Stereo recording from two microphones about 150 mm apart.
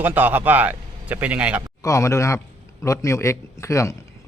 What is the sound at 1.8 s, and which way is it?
A man's voice, 20° left (ahead or behind).